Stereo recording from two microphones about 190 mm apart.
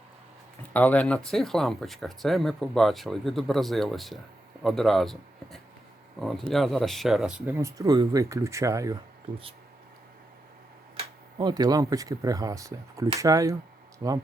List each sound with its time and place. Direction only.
0.7 s speech: 10° left (ahead or behind); by 9.0 s 15° right (ahead or behind)
11.3 s speech: 20° right (ahead or behind)